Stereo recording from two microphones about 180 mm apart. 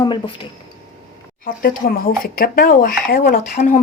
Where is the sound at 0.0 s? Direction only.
25° left (ahead or behind).